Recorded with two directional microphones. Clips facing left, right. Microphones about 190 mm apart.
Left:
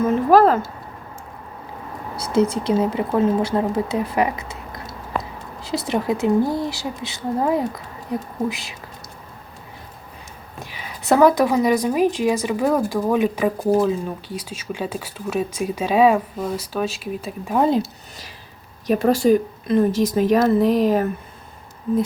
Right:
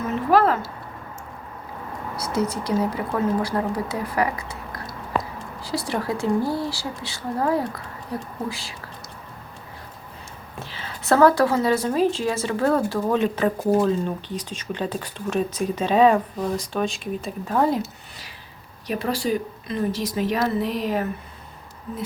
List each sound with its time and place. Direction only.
0.3 s a sound: 40° left (ahead or behind)
2.1 s a woman's voice: 30° left (ahead or behind)
10.6 s speech: 15° left (ahead or behind)
13.6 s speech: centre (ahead or behind)
18.9 s a woman's voice: 45° left (ahead or behind)